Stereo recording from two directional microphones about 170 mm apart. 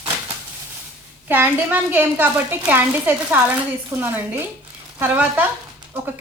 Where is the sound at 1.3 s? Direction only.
10° right (ahead or behind).